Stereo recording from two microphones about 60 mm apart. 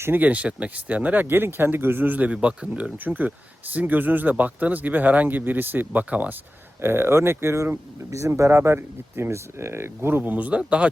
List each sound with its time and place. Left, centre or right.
0.2 s speech: right
3.0 s speech: right
6.8 s speech: right; by 10.9 s centre